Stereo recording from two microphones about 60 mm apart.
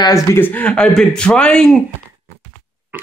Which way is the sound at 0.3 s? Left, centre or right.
Left.